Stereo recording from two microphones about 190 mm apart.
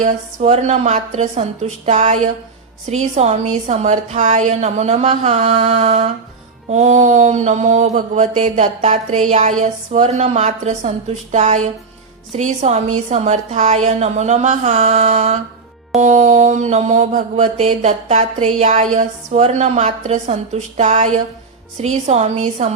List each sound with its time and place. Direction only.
0.0 s mantra: 35° right (ahead or behind)